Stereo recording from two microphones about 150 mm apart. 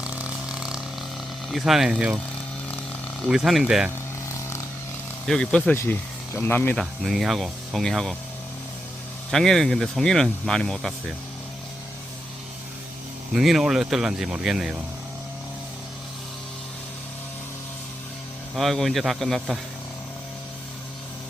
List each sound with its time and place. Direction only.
0.0 s ratchet: 5° right (ahead or behind)
1.5 s speech: centre (ahead or behind)
3.2 s speech: 5° right (ahead or behind)
5.2 s speech: 5° left (ahead or behind)
5.7 s speech: 15° left (ahead or behind)
6.7 s speech: centre (ahead or behind)
9.3 s speech: centre (ahead or behind)
13.3 s speech: centre (ahead or behind)
18.5 s speech: centre (ahead or behind)